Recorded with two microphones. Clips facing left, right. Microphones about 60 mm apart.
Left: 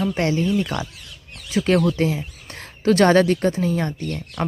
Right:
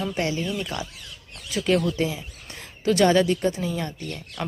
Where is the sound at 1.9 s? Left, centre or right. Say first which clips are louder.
Left 4 dB; left.